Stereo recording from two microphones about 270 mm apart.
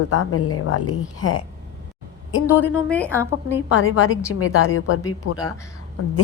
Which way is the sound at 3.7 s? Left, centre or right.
Left.